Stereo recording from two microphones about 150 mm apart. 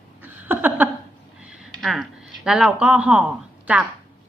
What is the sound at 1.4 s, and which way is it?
A woman's voice, 5° right (ahead or behind).